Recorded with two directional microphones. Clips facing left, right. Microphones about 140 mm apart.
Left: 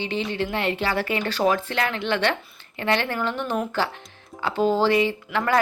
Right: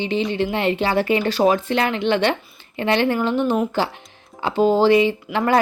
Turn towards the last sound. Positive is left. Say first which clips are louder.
# right 4 dB
turn(degrees=-20)  # may be behind; listen again after turning